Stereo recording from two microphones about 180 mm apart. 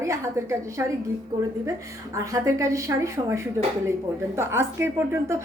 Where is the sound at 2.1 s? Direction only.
15° right (ahead or behind).